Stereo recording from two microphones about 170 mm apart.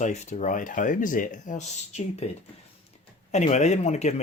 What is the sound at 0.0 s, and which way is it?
Speech, 45° left (ahead or behind).